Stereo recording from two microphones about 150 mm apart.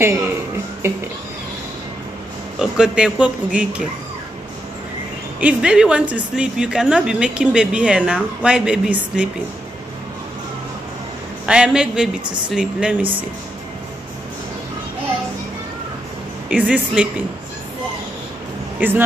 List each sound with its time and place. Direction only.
0.8 s speech: 15° right (ahead or behind)
2.6 s speech: 5° right (ahead or behind)
5.4 s speech: 5° right (ahead or behind)
11.4 s speech: 5° right (ahead or behind)
16.4 s speech: 10° right (ahead or behind)
18.8 s speech: 15° right (ahead or behind)